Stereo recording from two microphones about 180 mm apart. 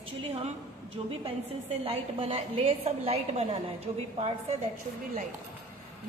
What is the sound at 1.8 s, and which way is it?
A woman's voice, 30° right (ahead or behind).